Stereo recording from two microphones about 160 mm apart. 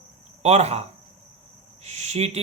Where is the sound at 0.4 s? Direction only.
45° right (ahead or behind).